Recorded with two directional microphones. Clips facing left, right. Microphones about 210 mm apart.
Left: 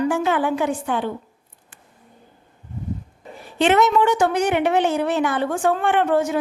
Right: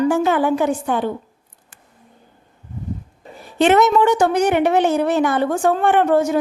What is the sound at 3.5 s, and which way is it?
A woman's voice, 45° right (ahead or behind).